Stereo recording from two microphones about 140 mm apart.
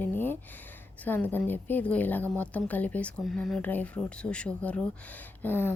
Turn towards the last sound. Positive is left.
turn(degrees=15)  # may be behind; listen again after turning